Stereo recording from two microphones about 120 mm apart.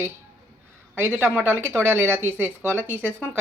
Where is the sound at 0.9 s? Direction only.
20° right (ahead or behind).